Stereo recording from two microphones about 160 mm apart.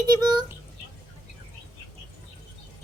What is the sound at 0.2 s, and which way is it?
Child singing, 25° right (ahead or behind).